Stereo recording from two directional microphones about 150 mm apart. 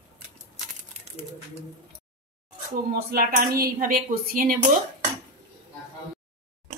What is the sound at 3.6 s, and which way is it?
Speech, 75° right (ahead or behind).